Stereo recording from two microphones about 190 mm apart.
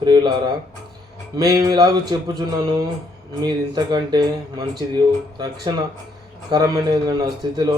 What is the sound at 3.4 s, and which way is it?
Speech, 20° right (ahead or behind).